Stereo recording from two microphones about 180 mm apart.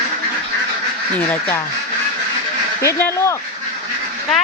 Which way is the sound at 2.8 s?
15° left (ahead or behind).